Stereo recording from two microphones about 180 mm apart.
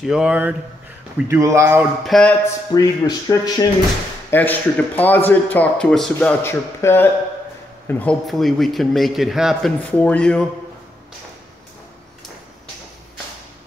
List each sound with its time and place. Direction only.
0.0 s a man's voice: 5° right (ahead or behind)
2.0 s a man's voice: 5° left (ahead or behind)
2.7 s speech: 20° left (ahead or behind)
4.3 s a man's voice: 10° left (ahead or behind)